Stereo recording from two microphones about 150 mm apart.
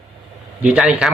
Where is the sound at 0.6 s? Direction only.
5° right (ahead or behind).